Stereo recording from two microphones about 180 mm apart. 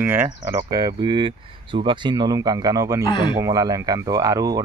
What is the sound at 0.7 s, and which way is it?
Speech, 20° right (ahead or behind).